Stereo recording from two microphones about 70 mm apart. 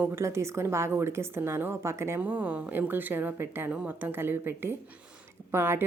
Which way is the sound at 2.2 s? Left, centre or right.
Right.